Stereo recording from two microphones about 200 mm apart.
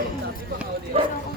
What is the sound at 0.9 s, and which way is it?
Speech, 30° right (ahead or behind).